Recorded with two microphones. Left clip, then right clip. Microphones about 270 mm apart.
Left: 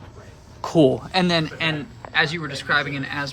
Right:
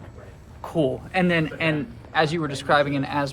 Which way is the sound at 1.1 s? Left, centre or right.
Centre.